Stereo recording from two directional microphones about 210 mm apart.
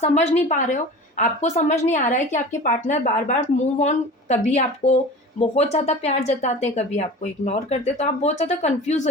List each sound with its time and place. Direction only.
0.0 s speech: 30° left (ahead or behind)